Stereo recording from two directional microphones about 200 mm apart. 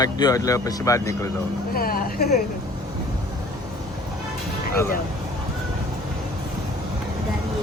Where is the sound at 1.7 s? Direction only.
50° left (ahead or behind).